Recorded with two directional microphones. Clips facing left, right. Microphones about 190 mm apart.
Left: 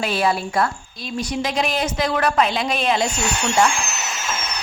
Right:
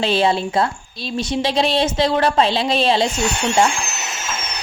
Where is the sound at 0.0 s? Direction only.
25° right (ahead or behind).